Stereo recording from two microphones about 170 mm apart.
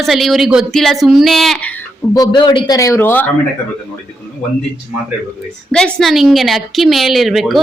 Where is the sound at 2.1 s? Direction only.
25° left (ahead or behind).